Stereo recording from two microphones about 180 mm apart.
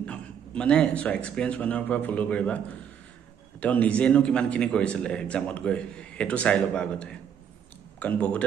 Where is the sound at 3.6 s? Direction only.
10° left (ahead or behind).